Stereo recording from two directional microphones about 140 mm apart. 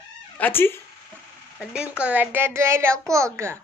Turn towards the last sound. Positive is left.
turn(degrees=-20)  # may be behind; listen again after turning